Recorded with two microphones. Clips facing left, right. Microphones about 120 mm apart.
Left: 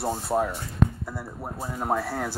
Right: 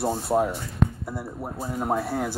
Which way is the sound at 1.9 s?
15° right (ahead or behind).